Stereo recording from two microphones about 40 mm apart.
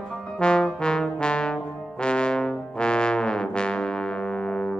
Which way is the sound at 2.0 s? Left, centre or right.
Left.